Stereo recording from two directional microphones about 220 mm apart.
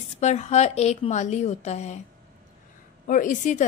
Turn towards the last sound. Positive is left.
turn(degrees=35)  # may be behind; listen again after turning